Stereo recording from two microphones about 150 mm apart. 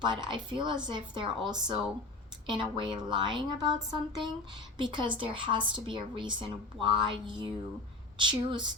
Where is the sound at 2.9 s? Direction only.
30° right (ahead or behind).